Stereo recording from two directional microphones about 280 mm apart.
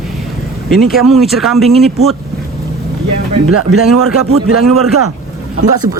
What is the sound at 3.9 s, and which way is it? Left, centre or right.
Speech, right.